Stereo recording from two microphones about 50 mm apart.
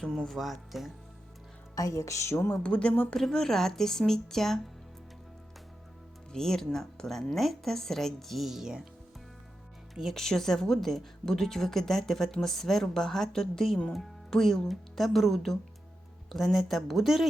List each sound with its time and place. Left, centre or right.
0.2 s speech: centre
1.9 s speech: left
2.5 s speech: left
3.2 s speech: centre
6.3 s speech: centre
9.9 s speech: centre